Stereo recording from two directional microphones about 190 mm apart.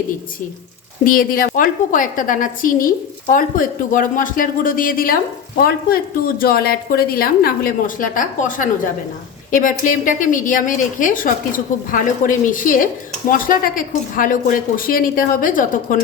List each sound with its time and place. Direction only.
1.0 s a woman's voice: 50° left (ahead or behind)